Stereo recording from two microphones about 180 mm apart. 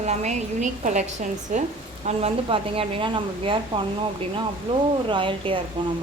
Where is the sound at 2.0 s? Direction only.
30° right (ahead or behind).